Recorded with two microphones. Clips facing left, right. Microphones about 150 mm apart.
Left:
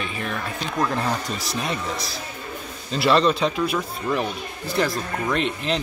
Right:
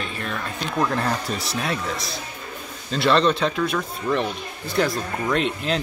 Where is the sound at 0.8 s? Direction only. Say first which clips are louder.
Right 1 dB; centre (ahead or behind).